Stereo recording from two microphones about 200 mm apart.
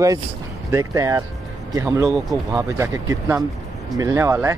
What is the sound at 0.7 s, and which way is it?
Speech, 15° right (ahead or behind).